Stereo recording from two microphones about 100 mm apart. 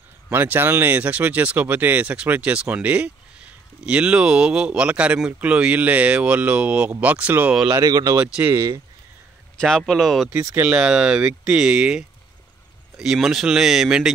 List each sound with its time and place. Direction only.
0.3 s speech: 20° right (ahead or behind)
7.7 s speech: 40° right (ahead or behind)
8.2 s speech: 15° right (ahead or behind)
8.5 s speech: 40° right (ahead or behind)
9.6 s speech: 5° left (ahead or behind)
10.5 s speech: 15° right (ahead or behind)